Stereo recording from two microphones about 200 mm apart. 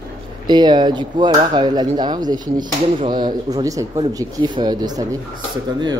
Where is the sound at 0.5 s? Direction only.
20° right (ahead or behind).